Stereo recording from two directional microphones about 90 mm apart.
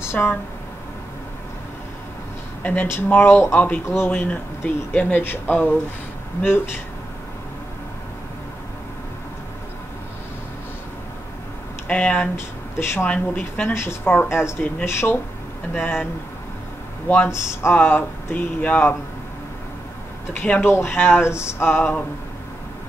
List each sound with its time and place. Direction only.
0.1 s speech: 20° left (ahead or behind)
2.6 s speech: 20° left (ahead or behind)
3.8 s speech: 30° left (ahead or behind)
4.1 s speech: 15° left (ahead or behind)
11.9 s speech: 15° left (ahead or behind)
12.4 s speech: 25° left (ahead or behind)
15.7 s speech: 20° left (ahead or behind)
17.3 s speech: 30° left (ahead or behind)
20.3 s speech: 20° left (ahead or behind)